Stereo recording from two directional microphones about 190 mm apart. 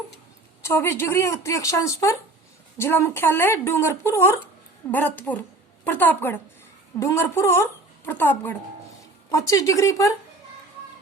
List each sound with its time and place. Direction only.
0.6 s speech: 15° left (ahead or behind)